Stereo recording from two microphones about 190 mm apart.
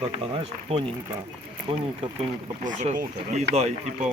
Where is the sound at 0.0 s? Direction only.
30° right (ahead or behind).